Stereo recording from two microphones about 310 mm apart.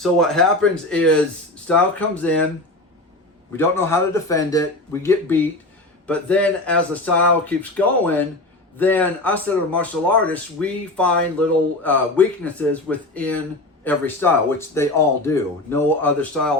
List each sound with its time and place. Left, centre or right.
0.0 s a man's voice: centre
3.5 s a man's voice: centre